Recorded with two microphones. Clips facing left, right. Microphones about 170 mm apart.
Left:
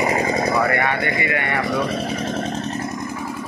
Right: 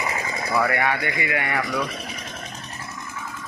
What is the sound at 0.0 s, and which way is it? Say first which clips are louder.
Vehicle: left 9 dB; 40° left (ahead or behind).